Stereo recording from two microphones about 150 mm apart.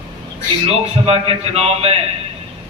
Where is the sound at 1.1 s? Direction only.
40° right (ahead or behind).